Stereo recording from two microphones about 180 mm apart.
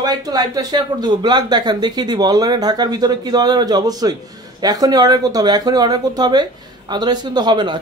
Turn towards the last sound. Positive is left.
turn(degrees=-25)  # may be behind; listen again after turning